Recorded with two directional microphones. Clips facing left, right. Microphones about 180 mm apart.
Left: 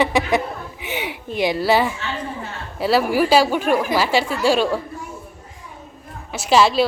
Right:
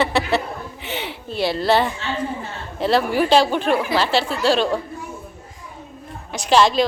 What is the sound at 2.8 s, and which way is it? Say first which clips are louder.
Speech: left 1 dB; 5° left (ahead or behind).